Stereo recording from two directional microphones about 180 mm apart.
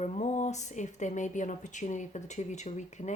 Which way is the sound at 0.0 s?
40° left (ahead or behind).